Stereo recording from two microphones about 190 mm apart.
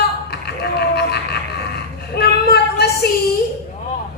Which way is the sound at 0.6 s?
60° left (ahead or behind).